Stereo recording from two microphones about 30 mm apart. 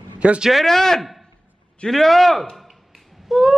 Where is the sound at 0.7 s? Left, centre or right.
Centre.